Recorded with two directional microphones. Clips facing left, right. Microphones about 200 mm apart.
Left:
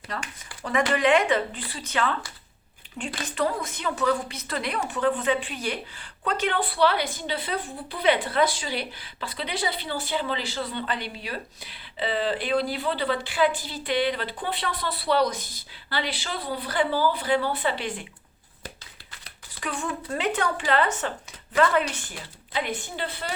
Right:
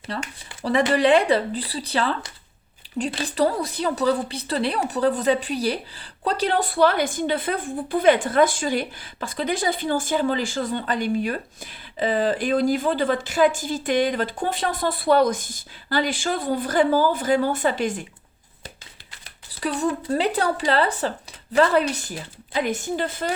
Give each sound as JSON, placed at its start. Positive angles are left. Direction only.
{"t": 0.1, "sound": "a woman's voice", "side_deg": -30}
{"t": 19.5, "sound": "speech", "side_deg": -35}